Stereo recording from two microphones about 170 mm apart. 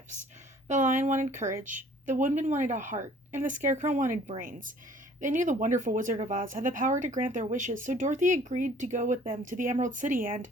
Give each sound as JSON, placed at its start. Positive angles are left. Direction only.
{"t": 0.7, "sound": "speech", "side_deg": -50}